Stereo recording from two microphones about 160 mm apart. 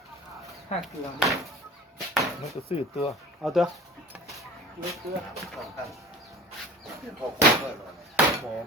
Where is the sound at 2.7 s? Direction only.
40° left (ahead or behind).